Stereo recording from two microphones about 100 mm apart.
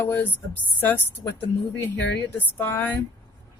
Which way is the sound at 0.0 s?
20° left (ahead or behind).